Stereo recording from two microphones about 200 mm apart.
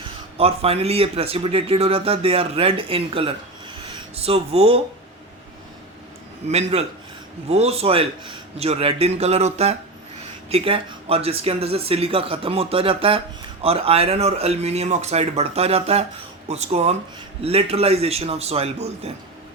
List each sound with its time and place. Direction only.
0.3 s speech: 30° right (ahead or behind)
6.5 s a man's voice: 30° right (ahead or behind)